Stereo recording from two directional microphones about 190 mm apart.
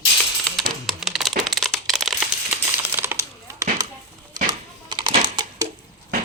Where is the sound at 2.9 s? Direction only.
15° right (ahead or behind).